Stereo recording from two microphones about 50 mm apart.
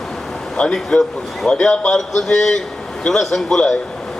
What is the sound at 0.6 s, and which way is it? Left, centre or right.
Speech, left.